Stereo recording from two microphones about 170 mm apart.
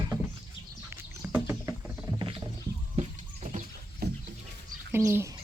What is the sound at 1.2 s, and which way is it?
Rowboat, 10° right (ahead or behind).